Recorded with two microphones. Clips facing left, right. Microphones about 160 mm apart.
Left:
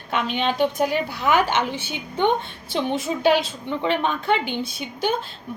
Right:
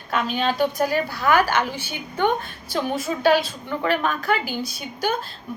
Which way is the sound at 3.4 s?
25° left (ahead or behind).